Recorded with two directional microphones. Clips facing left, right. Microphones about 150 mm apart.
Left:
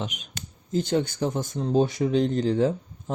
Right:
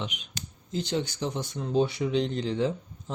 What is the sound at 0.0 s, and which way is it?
Speech, 45° left (ahead or behind).